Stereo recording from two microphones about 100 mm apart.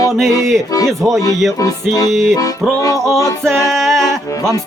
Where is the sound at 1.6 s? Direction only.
40° left (ahead or behind).